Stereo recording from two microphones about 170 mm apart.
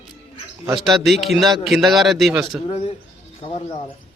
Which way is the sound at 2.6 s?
40° left (ahead or behind).